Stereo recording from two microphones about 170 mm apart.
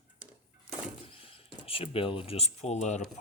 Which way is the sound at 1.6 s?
35° left (ahead or behind).